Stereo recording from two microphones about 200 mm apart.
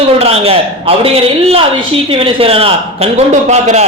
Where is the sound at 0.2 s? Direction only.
30° right (ahead or behind).